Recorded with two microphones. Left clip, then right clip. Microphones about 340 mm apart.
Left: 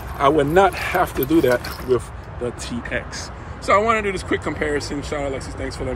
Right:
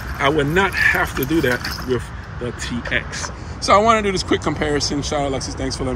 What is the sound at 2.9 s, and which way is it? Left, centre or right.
Speech, centre.